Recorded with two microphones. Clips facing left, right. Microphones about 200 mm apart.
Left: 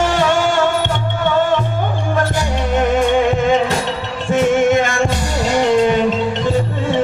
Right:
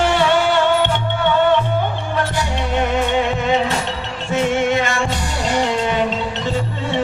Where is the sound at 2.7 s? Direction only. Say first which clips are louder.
Left 4 dB; 45° left (ahead or behind).